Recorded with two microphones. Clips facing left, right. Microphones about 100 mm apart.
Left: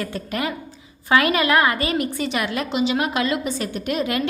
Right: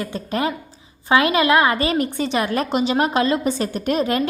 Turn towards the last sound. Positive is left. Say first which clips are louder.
# right 3 dB
turn(degrees=-35)  # may be behind; listen again after turning